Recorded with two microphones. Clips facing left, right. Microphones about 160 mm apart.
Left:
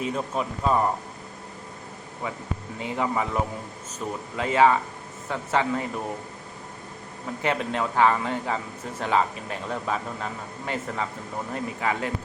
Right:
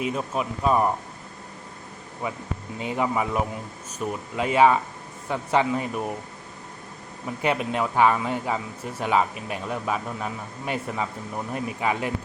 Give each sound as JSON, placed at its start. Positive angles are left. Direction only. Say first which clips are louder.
{"t": 0.0, "sound": "a man's voice", "louder": "right 1 dB", "side_deg": -10}
{"t": 2.7, "sound": "a man's voice", "louder": "right 2 dB", "side_deg": -20}
{"t": 7.4, "sound": "a man's voice", "louder": "right 2 dB", "side_deg": -15}